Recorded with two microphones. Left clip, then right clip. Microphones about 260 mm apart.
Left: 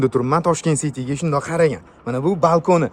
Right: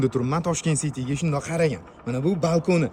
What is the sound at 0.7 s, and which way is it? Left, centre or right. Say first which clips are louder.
Speech: left 4 dB; left.